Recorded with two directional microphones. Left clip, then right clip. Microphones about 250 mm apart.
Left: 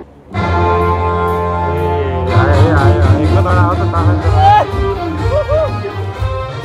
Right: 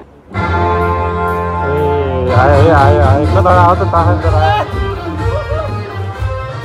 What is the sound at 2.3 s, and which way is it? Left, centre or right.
Music, right.